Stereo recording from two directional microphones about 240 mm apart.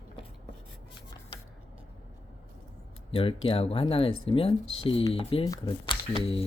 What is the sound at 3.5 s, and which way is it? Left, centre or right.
Speech, left.